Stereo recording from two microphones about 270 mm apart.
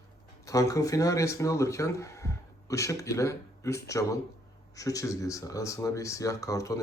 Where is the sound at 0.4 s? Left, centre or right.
Centre.